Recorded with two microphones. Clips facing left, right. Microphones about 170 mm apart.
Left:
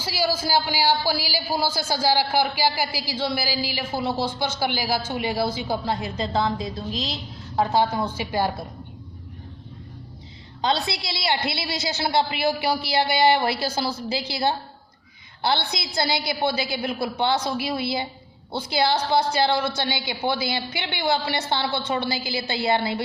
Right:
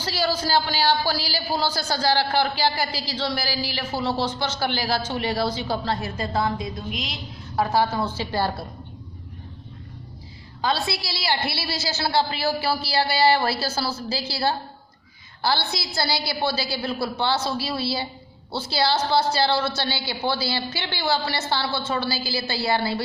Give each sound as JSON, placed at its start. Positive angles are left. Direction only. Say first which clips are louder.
{"t": 0.0, "sound": "a man's voice", "louder": "even", "side_deg": 10}
{"t": 10.6, "sound": "a woman's voice", "louder": "left 1 dB", "side_deg": 20}